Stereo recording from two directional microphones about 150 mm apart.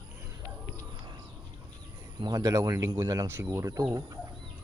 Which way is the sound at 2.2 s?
25° right (ahead or behind).